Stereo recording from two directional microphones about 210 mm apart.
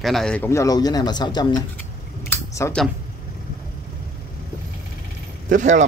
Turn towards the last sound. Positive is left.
turn(degrees=-35)  # may be behind; listen again after turning